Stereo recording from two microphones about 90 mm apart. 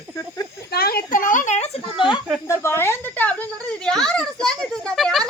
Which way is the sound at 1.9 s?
65° left (ahead or behind).